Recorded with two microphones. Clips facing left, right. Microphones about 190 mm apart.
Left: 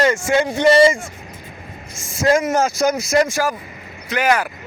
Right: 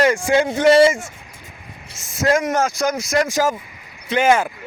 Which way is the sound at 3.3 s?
20° right (ahead or behind).